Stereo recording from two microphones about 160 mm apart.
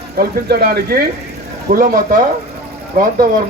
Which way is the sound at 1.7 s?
60° right (ahead or behind).